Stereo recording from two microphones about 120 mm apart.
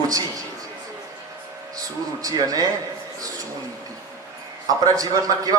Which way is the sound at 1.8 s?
30° right (ahead or behind).